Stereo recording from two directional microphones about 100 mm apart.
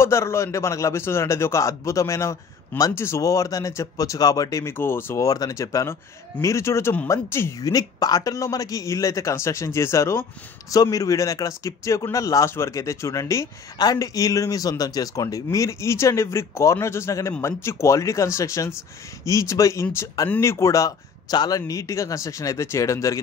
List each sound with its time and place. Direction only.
0.0 s a man's voice: 25° left (ahead or behind)
7.6 s speech: 40° left (ahead or behind)